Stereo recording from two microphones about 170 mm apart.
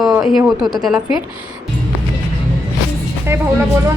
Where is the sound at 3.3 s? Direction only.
15° right (ahead or behind).